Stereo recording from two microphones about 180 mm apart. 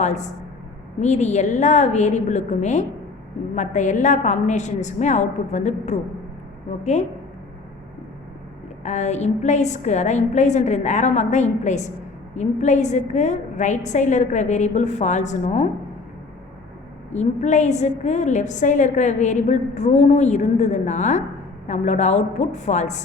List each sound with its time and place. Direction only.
0.0 s a woman's voice: 40° left (ahead or behind)
8.8 s a woman's voice: 40° left (ahead or behind)
17.1 s a woman's voice: 40° left (ahead or behind)